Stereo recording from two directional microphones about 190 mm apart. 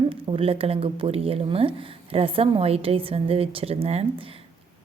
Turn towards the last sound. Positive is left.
turn(degrees=-30)  # may be behind; listen again after turning